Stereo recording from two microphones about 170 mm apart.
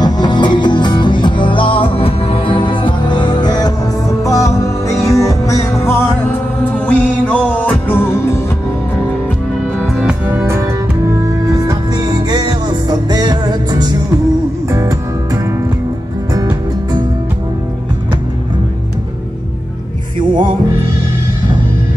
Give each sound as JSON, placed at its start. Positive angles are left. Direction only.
{"t": 0.0, "sound": "music", "side_deg": 25}
{"t": 9.8, "sound": "music", "side_deg": -5}